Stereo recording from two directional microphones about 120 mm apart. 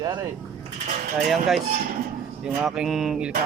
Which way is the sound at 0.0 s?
30° right (ahead or behind).